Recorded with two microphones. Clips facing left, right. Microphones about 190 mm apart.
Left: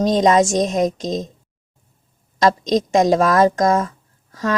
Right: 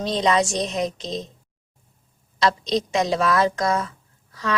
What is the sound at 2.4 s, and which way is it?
A woman's voice, 45° left (ahead or behind).